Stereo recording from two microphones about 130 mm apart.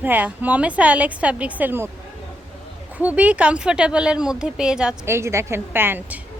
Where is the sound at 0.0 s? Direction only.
15° right (ahead or behind).